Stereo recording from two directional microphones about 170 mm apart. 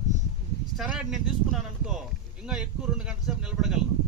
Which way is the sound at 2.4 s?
5° right (ahead or behind).